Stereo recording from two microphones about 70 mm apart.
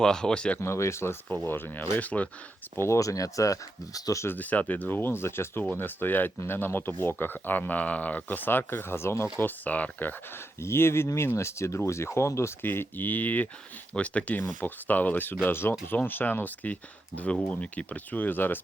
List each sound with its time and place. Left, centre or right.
0.0 s speech: centre
0.6 s speech: left
1.5 s speech: left
2.7 s speech: left
4.4 s speech: left
9.4 s speech: left
10.6 s speech: left
12.6 s speech: left